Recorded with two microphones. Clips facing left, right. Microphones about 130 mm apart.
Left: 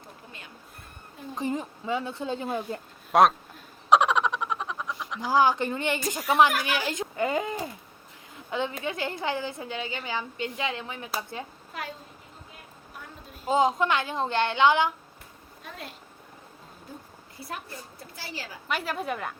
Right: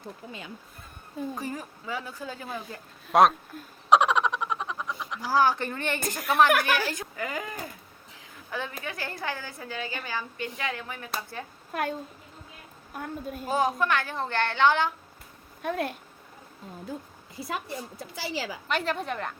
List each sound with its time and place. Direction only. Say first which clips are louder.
1.4 s a woman's voice: left 5 dB; 20° left (ahead or behind)
3.1 s speech: even; centre (ahead or behind)
3.8 s a sound: even; centre (ahead or behind)
5.3 s speech: left 1 dB; 15° left (ahead or behind)
6.5 s a woman's voice: right 5 dB; 60° right (ahead or behind)
6.7 s a woman's voice: left 2 dB; 20° left (ahead or behind)
11.7 s a woman's voice: right 11 dB; 55° right (ahead or behind)
13.5 s a woman's voice: left 3 dB; 20° left (ahead or behind)
15.6 s a woman's voice: right 12 dB; 60° right (ahead or behind)
18.1 s a woman's voice: right 7 dB; 90° right
18.7 s a woman's voice: even; 5° left (ahead or behind)